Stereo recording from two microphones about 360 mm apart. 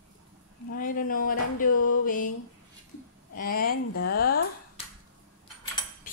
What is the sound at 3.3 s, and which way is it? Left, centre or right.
Speech, left.